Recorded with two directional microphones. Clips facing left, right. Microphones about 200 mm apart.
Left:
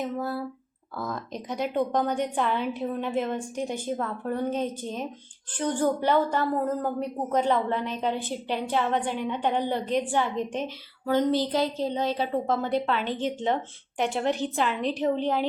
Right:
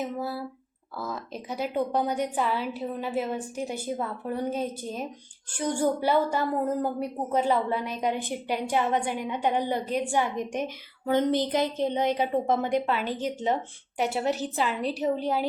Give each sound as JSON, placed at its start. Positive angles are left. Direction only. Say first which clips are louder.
{"t": 0.2, "sound": "a woman's voice", "louder": "left 2 dB", "side_deg": -5}